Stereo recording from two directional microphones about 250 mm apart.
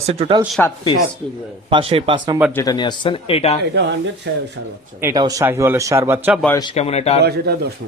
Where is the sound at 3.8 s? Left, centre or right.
Right.